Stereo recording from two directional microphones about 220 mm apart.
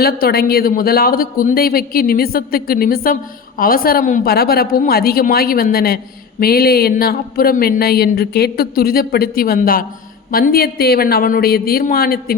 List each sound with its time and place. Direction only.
0.0 s speech: 45° left (ahead or behind)